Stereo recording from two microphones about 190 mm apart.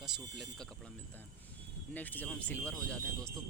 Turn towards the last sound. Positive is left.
turn(degrees=5)  # may be behind; listen again after turning